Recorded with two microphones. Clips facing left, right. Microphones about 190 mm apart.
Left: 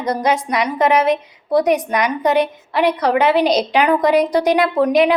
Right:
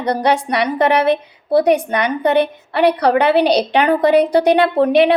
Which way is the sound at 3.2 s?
30° right (ahead or behind).